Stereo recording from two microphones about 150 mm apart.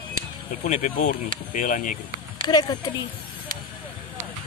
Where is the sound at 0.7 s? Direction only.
50° left (ahead or behind).